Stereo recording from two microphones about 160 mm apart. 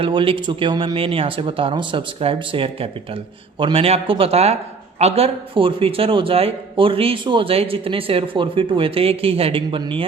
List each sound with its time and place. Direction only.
0.0 s a man's voice: 35° right (ahead or behind)